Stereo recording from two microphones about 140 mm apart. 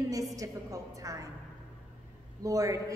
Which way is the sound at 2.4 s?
25° right (ahead or behind).